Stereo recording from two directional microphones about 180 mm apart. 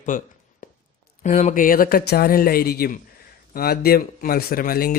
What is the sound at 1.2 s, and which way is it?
Speech, 45° left (ahead or behind).